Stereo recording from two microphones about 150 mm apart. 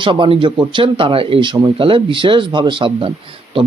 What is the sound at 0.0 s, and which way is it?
A man's voice, 35° right (ahead or behind).